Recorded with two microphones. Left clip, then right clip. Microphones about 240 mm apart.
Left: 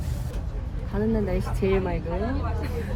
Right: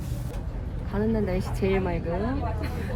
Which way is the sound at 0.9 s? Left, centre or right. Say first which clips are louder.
Left 1 dB; centre.